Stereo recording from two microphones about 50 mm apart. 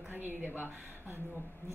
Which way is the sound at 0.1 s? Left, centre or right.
Right.